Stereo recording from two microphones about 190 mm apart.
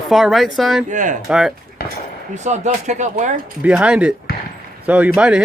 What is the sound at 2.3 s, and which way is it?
Speech, 40° right (ahead or behind).